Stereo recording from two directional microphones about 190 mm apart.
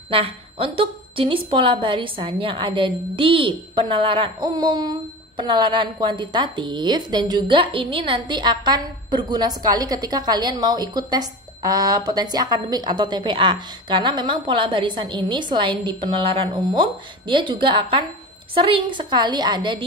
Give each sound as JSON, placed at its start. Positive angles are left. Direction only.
{"t": 0.1, "sound": "speech", "side_deg": -30}